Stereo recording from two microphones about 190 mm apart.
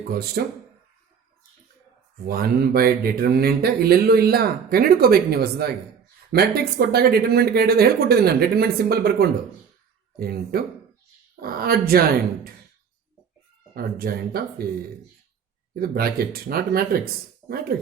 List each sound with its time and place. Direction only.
0.1 s speech: 55° right (ahead or behind)
2.2 s speech: 50° right (ahead or behind)
15.7 s speech: 50° right (ahead or behind)